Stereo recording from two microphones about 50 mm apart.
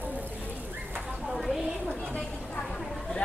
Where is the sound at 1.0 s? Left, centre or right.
Centre.